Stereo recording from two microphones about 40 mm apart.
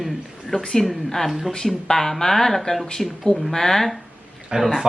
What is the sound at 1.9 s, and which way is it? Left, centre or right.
Speech, centre.